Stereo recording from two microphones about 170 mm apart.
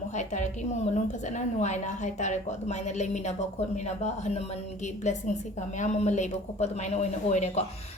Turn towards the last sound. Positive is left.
turn(degrees=40)  # may be behind; listen again after turning